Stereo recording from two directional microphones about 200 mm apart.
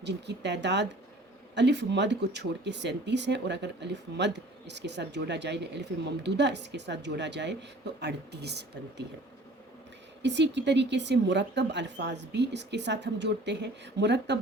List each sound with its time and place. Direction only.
0.0 s speech: 60° right (ahead or behind)
10.2 s speech: 60° right (ahead or behind)